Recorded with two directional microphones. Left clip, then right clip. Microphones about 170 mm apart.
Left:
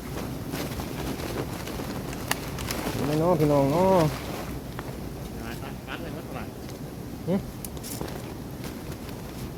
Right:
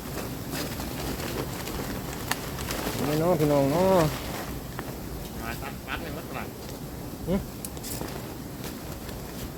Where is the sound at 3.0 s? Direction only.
20° left (ahead or behind).